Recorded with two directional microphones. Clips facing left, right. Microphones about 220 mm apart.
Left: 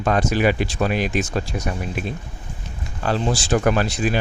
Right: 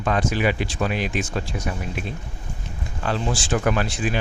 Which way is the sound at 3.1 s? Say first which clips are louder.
Left 4 dB; 40° left (ahead or behind).